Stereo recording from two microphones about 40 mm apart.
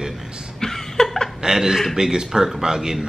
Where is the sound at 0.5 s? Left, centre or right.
Centre.